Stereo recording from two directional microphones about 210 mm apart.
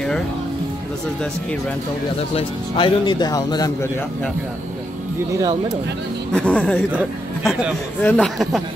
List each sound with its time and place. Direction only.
2.3 s a man's voice: 25° left (ahead or behind)
6.3 s speech: 5° left (ahead or behind)